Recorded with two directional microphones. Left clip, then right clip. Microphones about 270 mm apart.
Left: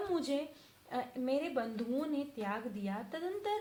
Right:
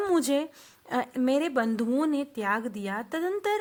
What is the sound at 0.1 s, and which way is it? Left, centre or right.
A woman's voice, right.